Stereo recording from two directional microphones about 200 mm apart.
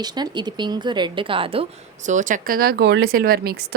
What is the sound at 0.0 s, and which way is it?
A woman's voice, 20° right (ahead or behind).